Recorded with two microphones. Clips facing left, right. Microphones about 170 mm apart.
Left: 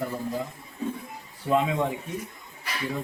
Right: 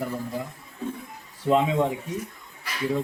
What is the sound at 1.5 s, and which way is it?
Speech, 20° right (ahead or behind).